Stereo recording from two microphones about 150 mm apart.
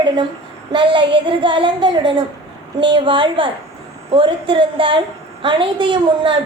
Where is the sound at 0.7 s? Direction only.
35° right (ahead or behind).